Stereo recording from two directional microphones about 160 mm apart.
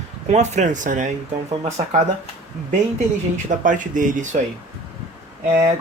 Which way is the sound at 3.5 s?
55° right (ahead or behind).